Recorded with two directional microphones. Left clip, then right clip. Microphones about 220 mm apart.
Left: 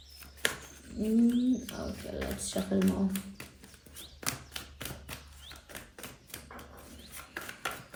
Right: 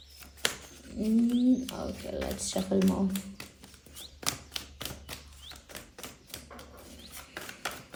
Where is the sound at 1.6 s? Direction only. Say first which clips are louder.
Right 3 dB; centre (ahead or behind).